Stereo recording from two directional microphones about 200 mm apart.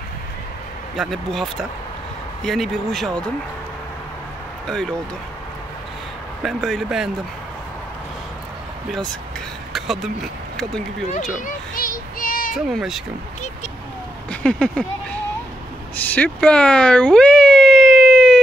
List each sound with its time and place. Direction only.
0.9 s speech: centre (ahead or behind)
6.4 s speech: centre (ahead or behind)
9.7 s speech: centre (ahead or behind)
11.4 s child singing: 45° left (ahead or behind)
12.5 s speech: centre (ahead or behind)
14.3 s speech: 5° left (ahead or behind)
16.0 s a sound: 10° left (ahead or behind)